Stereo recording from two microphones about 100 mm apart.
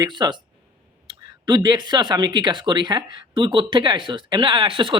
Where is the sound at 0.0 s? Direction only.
45° right (ahead or behind).